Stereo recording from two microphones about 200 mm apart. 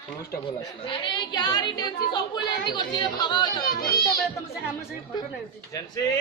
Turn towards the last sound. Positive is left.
turn(degrees=15)  # may be behind; listen again after turning